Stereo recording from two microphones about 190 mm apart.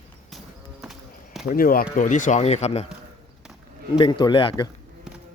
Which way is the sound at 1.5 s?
50° left (ahead or behind).